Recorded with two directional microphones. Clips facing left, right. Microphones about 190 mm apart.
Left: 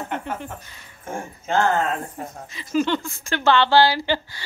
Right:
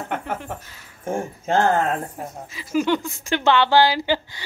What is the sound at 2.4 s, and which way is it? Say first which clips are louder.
Speech: even; 5° right (ahead or behind).